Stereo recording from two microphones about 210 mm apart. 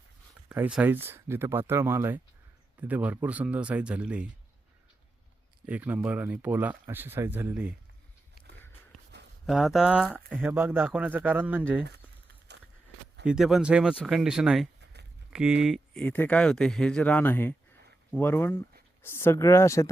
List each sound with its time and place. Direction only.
0.4 s speech: 5° right (ahead or behind)
5.6 s speech: 5° right (ahead or behind)
9.5 s speech: centre (ahead or behind)
12.5 s a sound: 55° right (ahead or behind)
13.2 s speech: 5° right (ahead or behind); by 19.9 s 15° left (ahead or behind)